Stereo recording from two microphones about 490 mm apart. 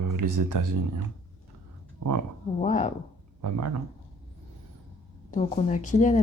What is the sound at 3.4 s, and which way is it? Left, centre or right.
Speech, right.